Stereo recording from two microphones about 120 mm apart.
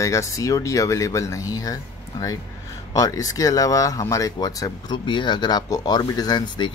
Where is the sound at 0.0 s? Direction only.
25° left (ahead or behind).